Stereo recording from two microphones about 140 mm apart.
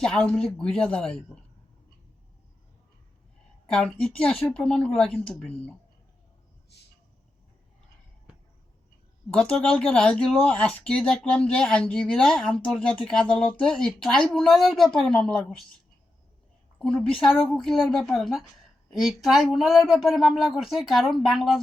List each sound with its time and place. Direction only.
0.0 s speech: 5° left (ahead or behind)
3.7 s speech: 5° left (ahead or behind)
9.3 s speech: 5° left (ahead or behind)
16.7 s a woman's voice: 10° left (ahead or behind)